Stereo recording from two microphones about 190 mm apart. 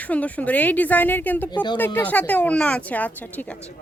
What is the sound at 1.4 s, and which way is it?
Speech, 25° left (ahead or behind).